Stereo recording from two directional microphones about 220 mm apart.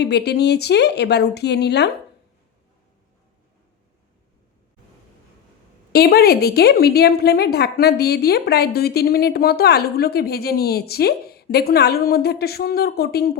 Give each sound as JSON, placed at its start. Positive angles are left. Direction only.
{"t": 0.0, "sound": "a woman's voice", "side_deg": 50}
{"t": 5.9, "sound": "a woman's voice", "side_deg": 45}